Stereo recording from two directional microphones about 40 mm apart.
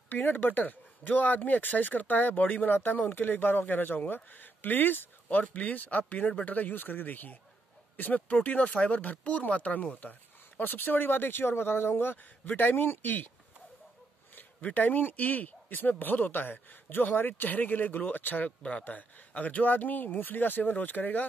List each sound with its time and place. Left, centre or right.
0.1 s speech: left
5.4 s speech: left
10.6 s speech: left
14.7 s speech: left
18.6 s speech: left
18.9 s speech: left